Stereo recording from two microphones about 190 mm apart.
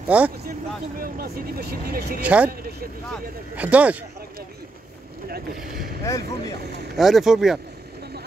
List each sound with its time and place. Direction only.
0.1 s speech: 5° right (ahead or behind)
0.5 s speech: 50° right (ahead or behind)
2.2 s speech: 5° right (ahead or behind)
3.5 s speech: 5° right (ahead or behind)
5.3 s speech: 45° right (ahead or behind)
6.1 s speech: 15° left (ahead or behind)
7.0 s speech: centre (ahead or behind)